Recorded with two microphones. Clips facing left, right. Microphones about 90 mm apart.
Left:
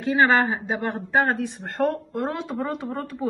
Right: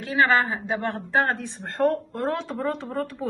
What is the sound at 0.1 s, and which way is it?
A woman's voice, 20° left (ahead or behind).